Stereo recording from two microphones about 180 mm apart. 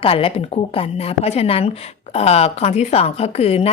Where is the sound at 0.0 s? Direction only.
30° left (ahead or behind).